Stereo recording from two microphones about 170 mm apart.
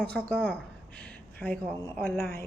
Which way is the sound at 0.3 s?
5° left (ahead or behind).